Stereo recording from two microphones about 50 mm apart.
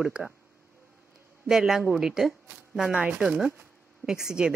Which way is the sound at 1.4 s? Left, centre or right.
Centre.